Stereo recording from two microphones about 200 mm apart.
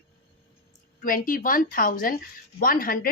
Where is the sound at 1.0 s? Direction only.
45° left (ahead or behind).